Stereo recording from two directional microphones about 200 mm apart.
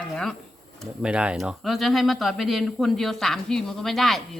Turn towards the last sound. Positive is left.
turn(degrees=0)  # may be behind; listen again after turning